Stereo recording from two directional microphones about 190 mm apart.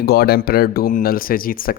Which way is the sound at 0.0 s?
55° left (ahead or behind).